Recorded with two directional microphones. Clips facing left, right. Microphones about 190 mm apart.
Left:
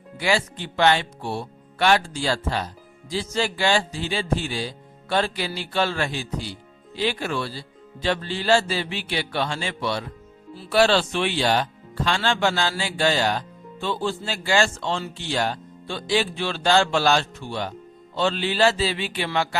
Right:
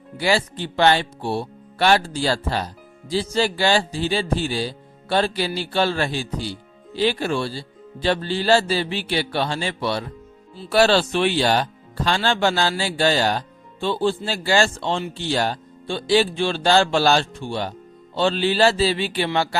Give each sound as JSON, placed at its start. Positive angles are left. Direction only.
{"t": 0.2, "sound": "a man's voice", "side_deg": -35}